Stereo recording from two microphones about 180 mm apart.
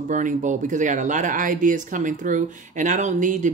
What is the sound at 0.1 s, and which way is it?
Speech, 45° right (ahead or behind).